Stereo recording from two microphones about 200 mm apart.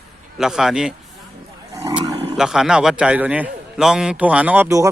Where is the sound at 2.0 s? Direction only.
25° right (ahead or behind).